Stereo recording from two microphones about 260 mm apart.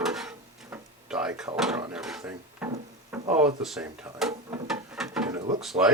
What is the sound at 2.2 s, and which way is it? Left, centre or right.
Wood, centre.